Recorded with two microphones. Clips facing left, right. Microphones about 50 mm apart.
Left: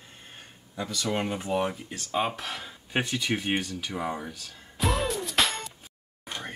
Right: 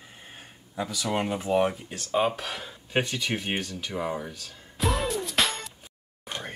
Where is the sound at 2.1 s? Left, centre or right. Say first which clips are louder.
Right 3 dB; centre.